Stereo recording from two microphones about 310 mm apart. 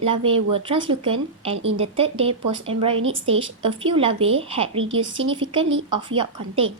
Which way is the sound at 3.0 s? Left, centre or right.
Right.